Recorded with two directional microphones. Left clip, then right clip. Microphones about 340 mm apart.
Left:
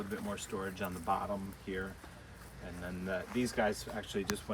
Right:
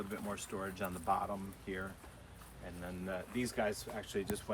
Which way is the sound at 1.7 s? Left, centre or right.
Right.